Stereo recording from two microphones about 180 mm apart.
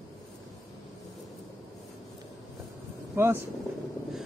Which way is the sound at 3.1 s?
15° right (ahead or behind).